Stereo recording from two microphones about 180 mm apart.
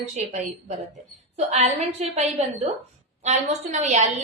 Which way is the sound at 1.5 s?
35° right (ahead or behind).